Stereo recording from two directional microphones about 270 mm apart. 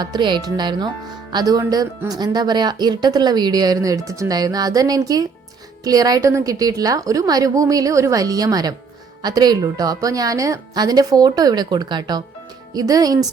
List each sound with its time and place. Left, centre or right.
0.0 s speech: centre